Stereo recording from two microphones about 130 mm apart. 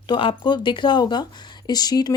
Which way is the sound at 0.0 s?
40° left (ahead or behind).